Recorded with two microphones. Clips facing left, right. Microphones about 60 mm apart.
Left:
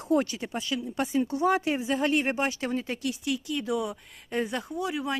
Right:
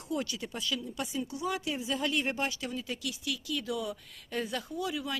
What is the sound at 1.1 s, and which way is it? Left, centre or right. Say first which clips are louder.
Speech: left 11 dB; left.